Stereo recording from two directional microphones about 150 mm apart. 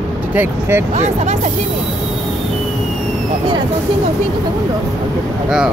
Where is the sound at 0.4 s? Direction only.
15° right (ahead or behind).